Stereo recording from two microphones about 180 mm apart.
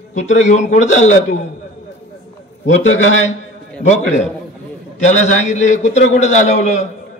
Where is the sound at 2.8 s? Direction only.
90° left.